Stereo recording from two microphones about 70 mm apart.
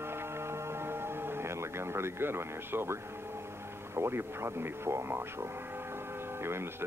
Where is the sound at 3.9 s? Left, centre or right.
Right.